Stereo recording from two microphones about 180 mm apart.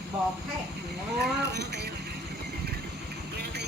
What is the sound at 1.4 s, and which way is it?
Speech, 70° right (ahead or behind).